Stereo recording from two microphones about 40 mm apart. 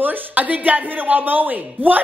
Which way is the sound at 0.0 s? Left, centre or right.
Right.